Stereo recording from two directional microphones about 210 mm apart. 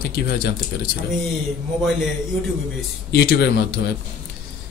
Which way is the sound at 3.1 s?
50° left (ahead or behind).